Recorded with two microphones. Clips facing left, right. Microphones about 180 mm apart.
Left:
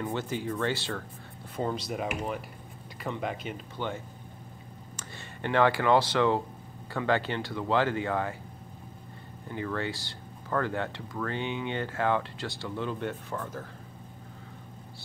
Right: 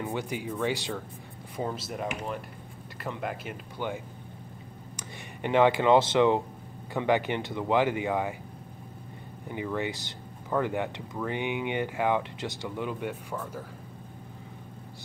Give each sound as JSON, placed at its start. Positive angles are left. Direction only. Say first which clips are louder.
{"t": 0.0, "sound": "speech", "louder": "left 1 dB", "side_deg": -10}
{"t": 1.6, "sound": "speech", "louder": "left 1 dB", "side_deg": -5}
{"t": 9.5, "sound": "speech", "louder": "right 1 dB", "side_deg": -15}